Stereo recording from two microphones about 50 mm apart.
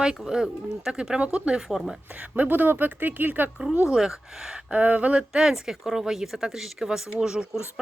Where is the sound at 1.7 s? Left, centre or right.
Centre.